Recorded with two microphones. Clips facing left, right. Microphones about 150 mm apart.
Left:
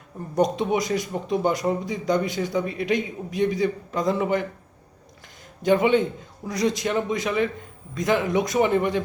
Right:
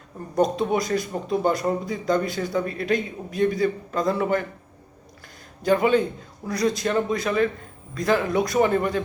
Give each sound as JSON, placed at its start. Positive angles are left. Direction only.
{"t": 0.3, "sound": "speech", "side_deg": 20}
{"t": 5.6, "sound": "a man's voice", "side_deg": 20}